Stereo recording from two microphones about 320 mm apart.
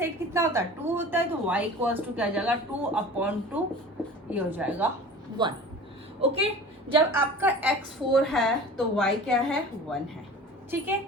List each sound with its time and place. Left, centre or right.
0.0 s a woman's voice: centre